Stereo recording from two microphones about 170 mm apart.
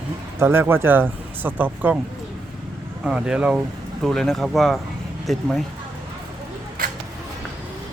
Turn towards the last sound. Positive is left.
turn(degrees=-60)  # may be behind; listen again after turning